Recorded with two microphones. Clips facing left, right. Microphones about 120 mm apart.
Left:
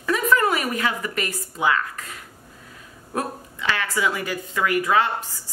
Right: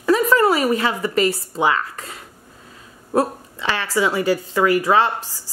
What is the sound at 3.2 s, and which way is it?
A woman's voice, 30° right (ahead or behind).